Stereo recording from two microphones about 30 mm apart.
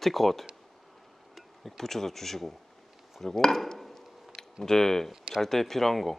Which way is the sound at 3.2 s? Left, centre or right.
Centre.